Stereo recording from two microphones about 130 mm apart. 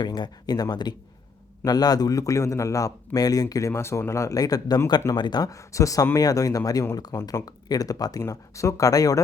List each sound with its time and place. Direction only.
0.0 s a man's voice: 35° left (ahead or behind)